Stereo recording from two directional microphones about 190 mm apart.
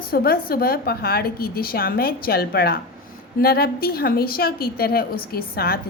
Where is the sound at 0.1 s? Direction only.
50° left (ahead or behind).